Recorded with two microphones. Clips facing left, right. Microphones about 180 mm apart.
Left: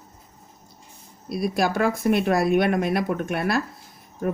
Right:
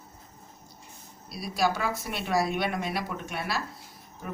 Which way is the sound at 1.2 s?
55° left (ahead or behind).